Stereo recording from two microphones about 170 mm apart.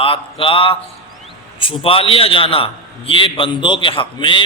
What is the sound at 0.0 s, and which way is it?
A man's voice, 30° left (ahead or behind).